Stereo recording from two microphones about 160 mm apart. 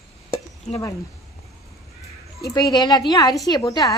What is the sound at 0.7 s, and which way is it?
Speech, 40° left (ahead or behind).